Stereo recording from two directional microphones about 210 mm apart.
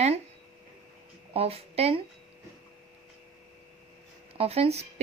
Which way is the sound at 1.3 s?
30° right (ahead or behind).